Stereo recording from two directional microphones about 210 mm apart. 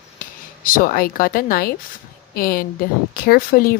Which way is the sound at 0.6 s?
40° left (ahead or behind).